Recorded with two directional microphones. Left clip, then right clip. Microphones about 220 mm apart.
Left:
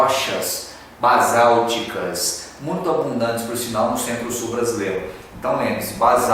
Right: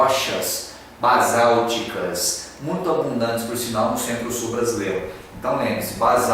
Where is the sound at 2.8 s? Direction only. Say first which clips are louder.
Left 1 dB; 25° right (ahead or behind).